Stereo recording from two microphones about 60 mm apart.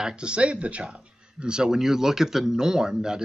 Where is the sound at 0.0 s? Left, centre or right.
Centre.